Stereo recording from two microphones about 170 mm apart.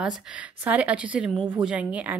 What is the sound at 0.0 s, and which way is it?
A woman's voice, 5° right (ahead or behind).